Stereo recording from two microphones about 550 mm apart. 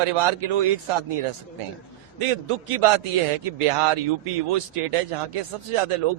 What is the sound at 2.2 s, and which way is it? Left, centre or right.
A man's voice, right.